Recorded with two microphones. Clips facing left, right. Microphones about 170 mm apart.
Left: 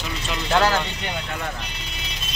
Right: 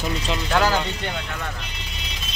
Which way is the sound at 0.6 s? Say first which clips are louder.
Left 1 dB; 10° right (ahead or behind).